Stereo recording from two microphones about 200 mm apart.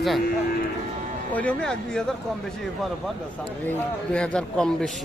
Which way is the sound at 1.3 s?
5° left (ahead or behind).